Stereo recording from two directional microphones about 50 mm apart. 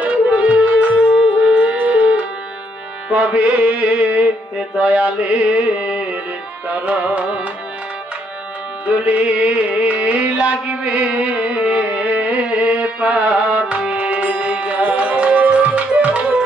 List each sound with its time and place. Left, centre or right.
0.0 s music: right
8.8 s music: right